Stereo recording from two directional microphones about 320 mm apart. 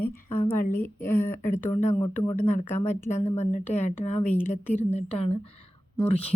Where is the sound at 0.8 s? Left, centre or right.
Centre.